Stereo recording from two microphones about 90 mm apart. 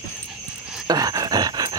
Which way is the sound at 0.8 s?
45° right (ahead or behind).